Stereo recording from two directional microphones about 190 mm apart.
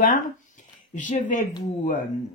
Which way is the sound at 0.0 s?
40° left (ahead or behind).